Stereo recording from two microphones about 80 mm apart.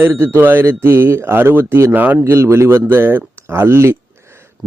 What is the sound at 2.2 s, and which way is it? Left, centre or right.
Speech, right.